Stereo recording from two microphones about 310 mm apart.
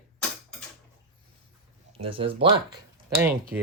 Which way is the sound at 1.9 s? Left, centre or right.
Centre.